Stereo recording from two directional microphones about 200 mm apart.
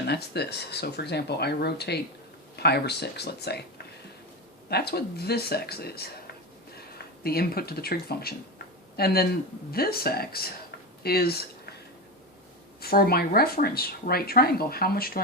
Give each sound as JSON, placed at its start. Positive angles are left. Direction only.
{"t": 0.0, "sound": "speech", "side_deg": 55}
{"t": 4.7, "sound": "speech", "side_deg": 55}
{"t": 7.3, "sound": "speech", "side_deg": 50}
{"t": 12.8, "sound": "speech", "side_deg": 50}